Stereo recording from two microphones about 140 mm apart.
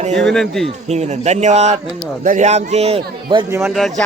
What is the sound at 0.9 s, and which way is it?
A man's voice, 50° right (ahead or behind).